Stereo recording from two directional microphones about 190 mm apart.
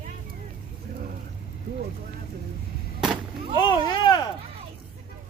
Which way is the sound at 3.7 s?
25° left (ahead or behind).